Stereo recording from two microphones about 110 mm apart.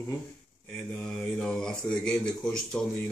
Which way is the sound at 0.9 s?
10° left (ahead or behind).